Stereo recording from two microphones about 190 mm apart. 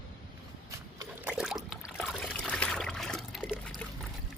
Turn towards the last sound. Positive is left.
turn(degrees=5)  # may be behind; listen again after turning